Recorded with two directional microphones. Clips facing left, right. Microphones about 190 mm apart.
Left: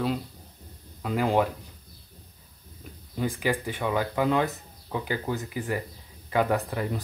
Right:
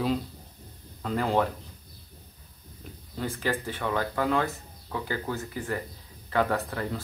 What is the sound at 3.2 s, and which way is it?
Speech, 15° left (ahead or behind).